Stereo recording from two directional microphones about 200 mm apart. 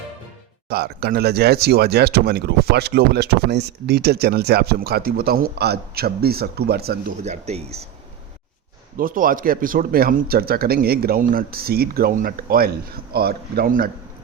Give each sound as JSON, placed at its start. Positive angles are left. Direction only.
{"t": 0.7, "sound": "speech", "side_deg": -50}
{"t": 7.2, "sound": "speech", "side_deg": -35}
{"t": 9.0, "sound": "speech", "side_deg": -45}